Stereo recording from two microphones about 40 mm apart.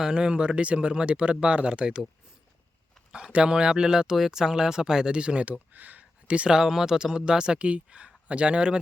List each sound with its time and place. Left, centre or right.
0.0 s speech: right
3.1 s speech: right
5.5 s speech: right
6.2 s speech: right
6.5 s speech: centre
7.0 s speech: centre
7.6 s speech: right